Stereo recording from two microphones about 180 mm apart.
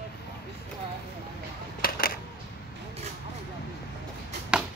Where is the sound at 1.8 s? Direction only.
55° left (ahead or behind).